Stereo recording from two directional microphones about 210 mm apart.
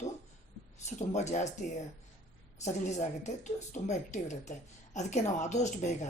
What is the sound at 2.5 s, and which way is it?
Speech, 35° left (ahead or behind).